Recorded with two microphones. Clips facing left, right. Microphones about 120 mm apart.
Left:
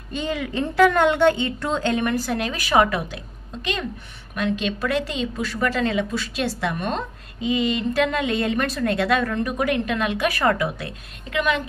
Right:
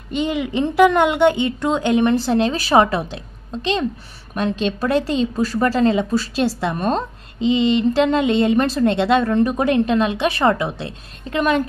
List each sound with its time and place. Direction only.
0.1 s a woman's voice: 20° right (ahead or behind); by 11.6 s 40° right (ahead or behind)